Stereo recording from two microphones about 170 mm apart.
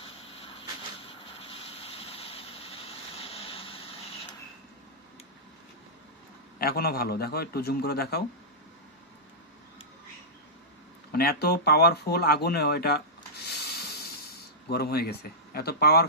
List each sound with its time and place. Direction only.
0.0 s a sound: 35° left (ahead or behind)
1.0 s vehicle: 30° left (ahead or behind)
6.6 s a man's voice: 65° left (ahead or behind)
11.1 s speech: 65° left (ahead or behind)